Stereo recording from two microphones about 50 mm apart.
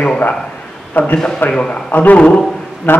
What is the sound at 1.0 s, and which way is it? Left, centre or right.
A man's voice, left.